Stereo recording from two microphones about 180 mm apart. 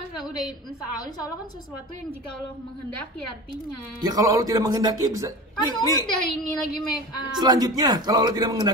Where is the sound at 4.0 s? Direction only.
20° right (ahead or behind).